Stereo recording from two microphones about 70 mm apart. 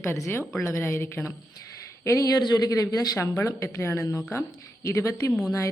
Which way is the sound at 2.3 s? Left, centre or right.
Left.